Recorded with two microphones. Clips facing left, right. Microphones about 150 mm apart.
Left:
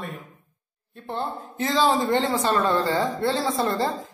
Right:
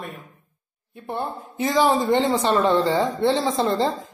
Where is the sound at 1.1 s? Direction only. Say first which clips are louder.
Right 1 dB; 15° right (ahead or behind).